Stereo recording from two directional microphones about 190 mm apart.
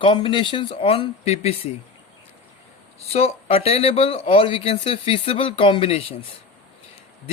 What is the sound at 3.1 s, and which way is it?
Speech, 30° left (ahead or behind).